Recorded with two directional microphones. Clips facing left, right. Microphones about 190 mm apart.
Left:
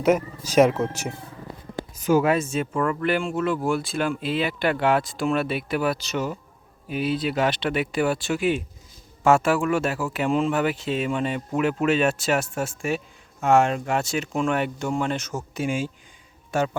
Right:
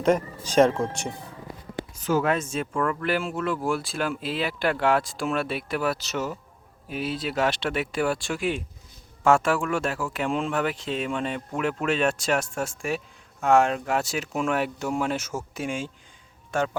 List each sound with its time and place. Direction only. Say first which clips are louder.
0.0 s speech: left 2 dB; 5° left (ahead or behind)
15.6 s speech: left 7 dB; 5° left (ahead or behind)